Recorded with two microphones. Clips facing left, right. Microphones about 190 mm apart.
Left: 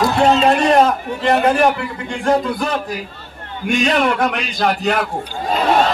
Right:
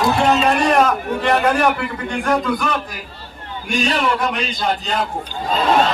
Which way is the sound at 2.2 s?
35° left (ahead or behind).